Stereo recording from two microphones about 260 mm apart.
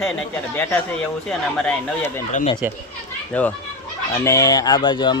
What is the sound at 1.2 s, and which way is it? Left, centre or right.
Speech, centre.